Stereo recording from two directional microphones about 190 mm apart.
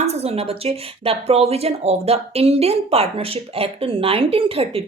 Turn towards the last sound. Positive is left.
turn(degrees=-30)  # may be behind; listen again after turning